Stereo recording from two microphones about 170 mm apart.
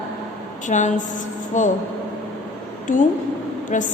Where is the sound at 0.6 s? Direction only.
45° left (ahead or behind).